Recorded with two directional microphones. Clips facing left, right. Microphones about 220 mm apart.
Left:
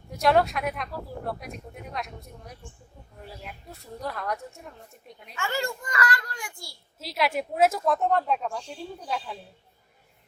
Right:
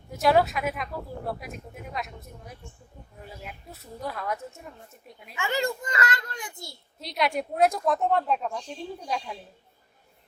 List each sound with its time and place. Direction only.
0.1 s speech: centre (ahead or behind)
5.4 s a child's voice: 20° right (ahead or behind)
7.0 s speech: centre (ahead or behind)